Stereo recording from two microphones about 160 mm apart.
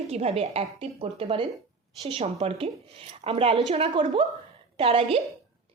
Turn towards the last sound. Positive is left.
turn(degrees=-35)  # may be behind; listen again after turning